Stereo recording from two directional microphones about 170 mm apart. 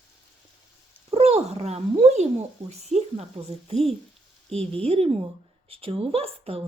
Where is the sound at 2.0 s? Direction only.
40° right (ahead or behind).